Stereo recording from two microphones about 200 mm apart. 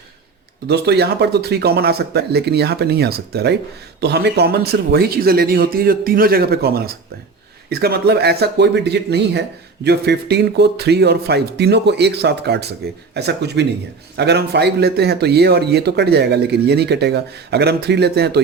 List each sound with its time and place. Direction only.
0.7 s a man's voice: 55° right (ahead or behind)